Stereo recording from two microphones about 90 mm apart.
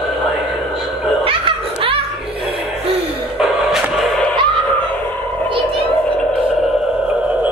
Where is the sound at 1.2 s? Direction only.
85° right.